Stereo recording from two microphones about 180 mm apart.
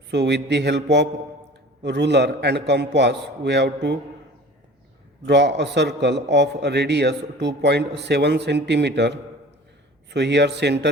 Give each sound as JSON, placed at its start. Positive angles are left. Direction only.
{"t": 0.1, "sound": "a man's voice", "side_deg": -70}
{"t": 5.2, "sound": "a man's voice", "side_deg": -75}